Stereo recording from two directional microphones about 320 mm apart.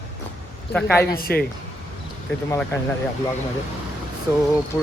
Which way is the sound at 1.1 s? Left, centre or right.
Left.